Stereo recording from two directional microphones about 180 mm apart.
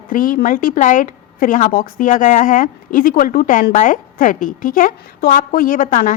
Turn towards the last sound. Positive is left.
turn(degrees=50)  # may be behind; listen again after turning